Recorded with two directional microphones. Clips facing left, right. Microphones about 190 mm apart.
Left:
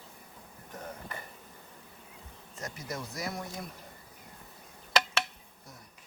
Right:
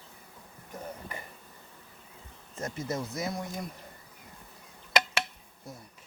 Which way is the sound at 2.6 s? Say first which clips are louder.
Right 6 dB; 25° right (ahead or behind).